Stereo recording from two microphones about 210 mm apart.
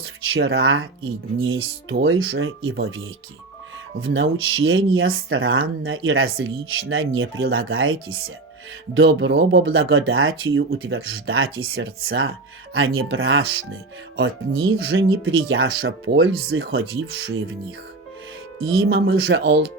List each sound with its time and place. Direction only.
0.0 s speech: 70° right (ahead or behind)
4.0 s speech: 70° right (ahead or behind)
9.0 s speech: 60° right (ahead or behind)
9.7 s speech: 75° right (ahead or behind)
18.6 s speech: 80° right
18.9 s speech: 50° right (ahead or behind)